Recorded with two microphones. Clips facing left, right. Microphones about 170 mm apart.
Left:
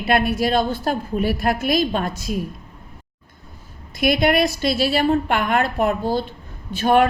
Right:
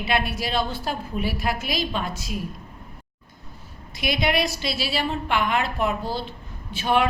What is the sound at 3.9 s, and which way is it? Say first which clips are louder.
A woman's voice: left 6 dB; 50° left (ahead or behind).